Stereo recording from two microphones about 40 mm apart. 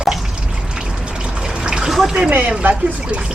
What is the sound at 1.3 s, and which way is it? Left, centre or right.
Trickle, centre.